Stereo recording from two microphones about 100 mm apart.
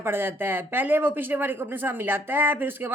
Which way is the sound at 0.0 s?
20° right (ahead or behind).